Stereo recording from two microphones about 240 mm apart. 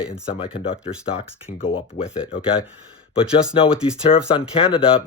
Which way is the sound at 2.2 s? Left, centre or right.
Left.